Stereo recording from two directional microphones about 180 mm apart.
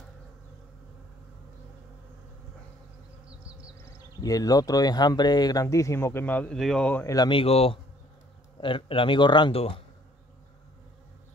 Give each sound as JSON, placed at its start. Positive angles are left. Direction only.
{"t": 4.2, "sound": "speech", "side_deg": 20}